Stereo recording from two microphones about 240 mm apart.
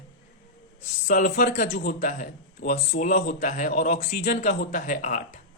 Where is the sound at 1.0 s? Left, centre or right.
Left.